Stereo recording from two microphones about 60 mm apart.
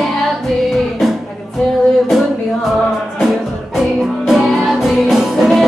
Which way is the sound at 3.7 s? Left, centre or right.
Centre.